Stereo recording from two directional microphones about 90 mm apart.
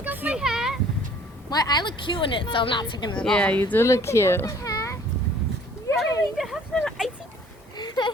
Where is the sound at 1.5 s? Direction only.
50° left (ahead or behind).